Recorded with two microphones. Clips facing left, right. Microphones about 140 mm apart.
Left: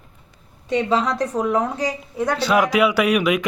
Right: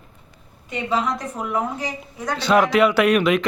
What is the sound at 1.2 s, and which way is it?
Speech, 40° left (ahead or behind).